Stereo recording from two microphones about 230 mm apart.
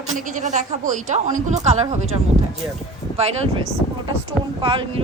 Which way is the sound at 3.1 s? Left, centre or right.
Right.